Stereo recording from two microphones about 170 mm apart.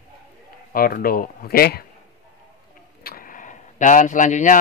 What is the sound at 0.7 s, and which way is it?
Speech, 60° left (ahead or behind).